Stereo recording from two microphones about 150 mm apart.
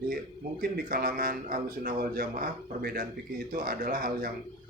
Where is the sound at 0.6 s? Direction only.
75° right (ahead or behind).